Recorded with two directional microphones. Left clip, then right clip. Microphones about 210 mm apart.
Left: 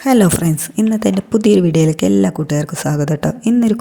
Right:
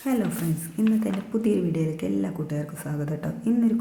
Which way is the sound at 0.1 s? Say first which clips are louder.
Left 14 dB; 45° left (ahead or behind).